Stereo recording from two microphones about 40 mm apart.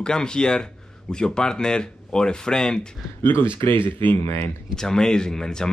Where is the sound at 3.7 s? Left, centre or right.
Left.